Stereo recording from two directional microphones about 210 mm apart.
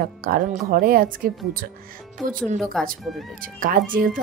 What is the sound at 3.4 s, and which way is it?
Speech, 40° right (ahead or behind).